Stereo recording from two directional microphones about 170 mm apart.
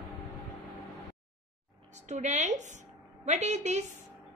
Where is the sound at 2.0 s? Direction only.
45° right (ahead or behind).